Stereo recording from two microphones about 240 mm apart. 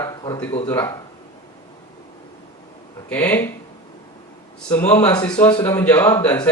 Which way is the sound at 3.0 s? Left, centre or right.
Centre.